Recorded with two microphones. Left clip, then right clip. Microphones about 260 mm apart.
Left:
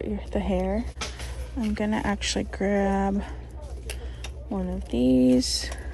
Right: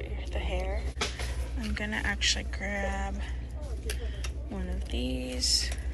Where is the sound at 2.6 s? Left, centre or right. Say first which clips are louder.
Left 9 dB; left.